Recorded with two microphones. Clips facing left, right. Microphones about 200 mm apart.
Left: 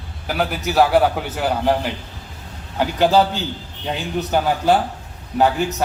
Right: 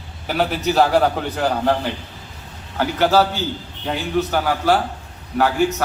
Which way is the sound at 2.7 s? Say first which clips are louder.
Left 1 dB; 15° left (ahead or behind).